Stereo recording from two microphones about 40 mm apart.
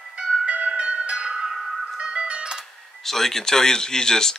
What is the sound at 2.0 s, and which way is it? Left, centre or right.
Music, centre.